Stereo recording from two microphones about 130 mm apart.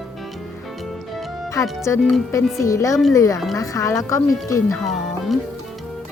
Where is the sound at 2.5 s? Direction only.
25° left (ahead or behind).